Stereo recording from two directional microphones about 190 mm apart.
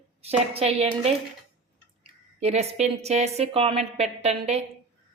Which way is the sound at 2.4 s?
35° right (ahead or behind).